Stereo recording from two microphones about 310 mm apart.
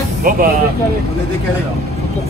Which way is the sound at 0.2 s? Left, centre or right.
Right.